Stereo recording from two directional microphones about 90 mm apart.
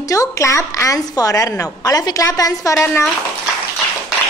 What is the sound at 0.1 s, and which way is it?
A woman's voice, 35° left (ahead or behind).